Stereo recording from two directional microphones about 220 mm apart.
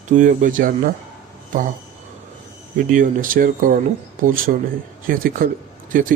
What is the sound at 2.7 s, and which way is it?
Speech, 40° right (ahead or behind).